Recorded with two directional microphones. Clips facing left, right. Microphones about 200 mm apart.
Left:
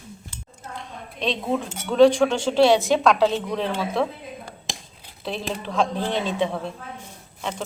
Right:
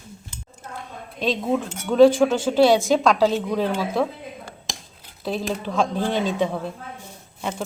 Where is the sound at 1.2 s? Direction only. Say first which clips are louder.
Right 2 dB; 5° right (ahead or behind).